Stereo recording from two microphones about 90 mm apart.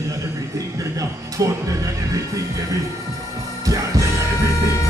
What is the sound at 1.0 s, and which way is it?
Speech, 40° right (ahead or behind).